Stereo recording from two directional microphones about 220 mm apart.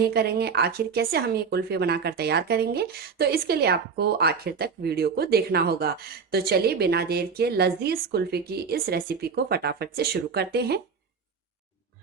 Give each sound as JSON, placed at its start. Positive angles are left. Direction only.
{"t": 0.0, "sound": "speech", "side_deg": -45}